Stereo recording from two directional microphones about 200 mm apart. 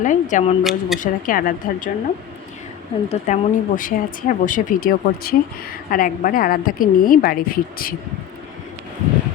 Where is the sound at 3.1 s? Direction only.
40° left (ahead or behind).